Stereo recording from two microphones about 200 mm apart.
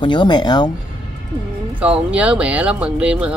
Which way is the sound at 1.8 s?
5° right (ahead or behind).